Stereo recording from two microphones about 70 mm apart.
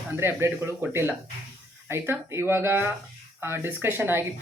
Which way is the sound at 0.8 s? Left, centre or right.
Right.